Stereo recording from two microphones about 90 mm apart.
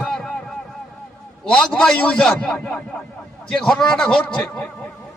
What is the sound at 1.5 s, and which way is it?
A man's voice, 10° left (ahead or behind).